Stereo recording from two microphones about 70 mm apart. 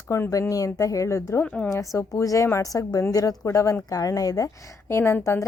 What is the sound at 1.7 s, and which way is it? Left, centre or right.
Speech, left.